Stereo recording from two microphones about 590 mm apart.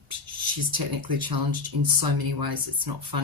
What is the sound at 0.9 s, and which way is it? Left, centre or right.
Speech, right.